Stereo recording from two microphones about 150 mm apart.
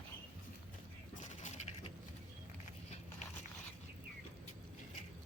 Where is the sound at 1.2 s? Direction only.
55° left (ahead or behind).